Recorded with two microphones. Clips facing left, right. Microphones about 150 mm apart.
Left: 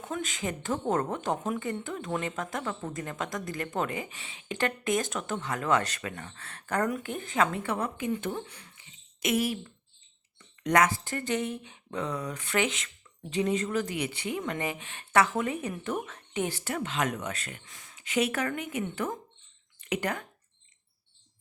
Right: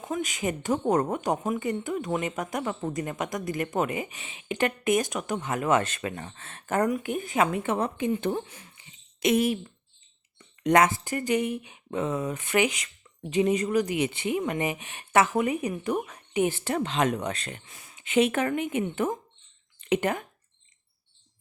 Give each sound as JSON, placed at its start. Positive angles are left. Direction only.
{"t": 0.0, "sound": "speech", "side_deg": -10}
{"t": 8.2, "sound": "a sound", "side_deg": -25}
{"t": 10.3, "sound": "speech", "side_deg": -25}
{"t": 16.7, "sound": "speech", "side_deg": -30}
{"t": 17.7, "sound": "speech", "side_deg": -20}